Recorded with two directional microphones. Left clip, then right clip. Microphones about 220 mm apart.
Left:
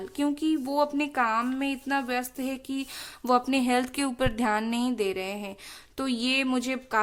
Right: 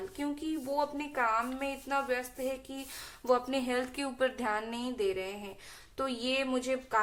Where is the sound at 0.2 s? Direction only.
50° left (ahead or behind).